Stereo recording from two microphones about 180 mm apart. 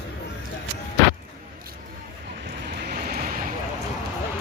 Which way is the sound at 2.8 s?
55° right (ahead or behind).